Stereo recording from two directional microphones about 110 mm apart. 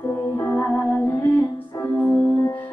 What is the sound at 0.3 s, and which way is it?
Music, 25° left (ahead or behind).